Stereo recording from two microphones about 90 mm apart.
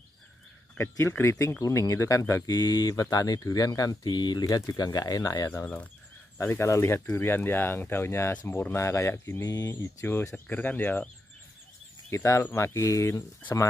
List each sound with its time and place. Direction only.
0.7 s speech: 30° left (ahead or behind)
6.3 s speech: 25° left (ahead or behind)
9.4 s speech: 45° left (ahead or behind)
9.7 s speech: 25° left (ahead or behind)
12.1 s speech: 30° left (ahead or behind)